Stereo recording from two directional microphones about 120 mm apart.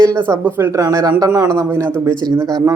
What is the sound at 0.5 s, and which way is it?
Speech, 25° right (ahead or behind).